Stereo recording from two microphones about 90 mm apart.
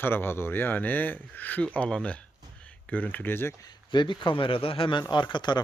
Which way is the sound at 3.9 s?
60° left (ahead or behind).